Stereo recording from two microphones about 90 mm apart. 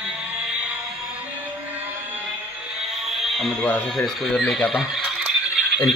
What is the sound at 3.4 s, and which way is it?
Speech, 10° left (ahead or behind).